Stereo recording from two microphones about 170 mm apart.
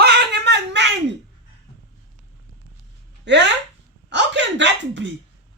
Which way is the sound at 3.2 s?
90° right.